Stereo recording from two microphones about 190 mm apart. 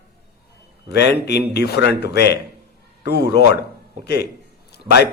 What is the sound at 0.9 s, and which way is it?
A man's voice, 60° left (ahead or behind).